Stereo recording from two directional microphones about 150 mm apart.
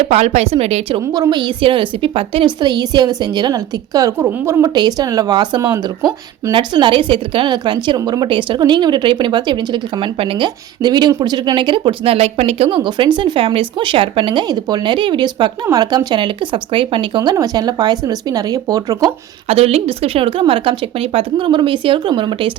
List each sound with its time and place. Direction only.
0.1 s a woman's voice: 45° right (ahead or behind)
1.1 s a woman's voice: 25° right (ahead or behind)
19.5 s a woman's voice: 40° right (ahead or behind)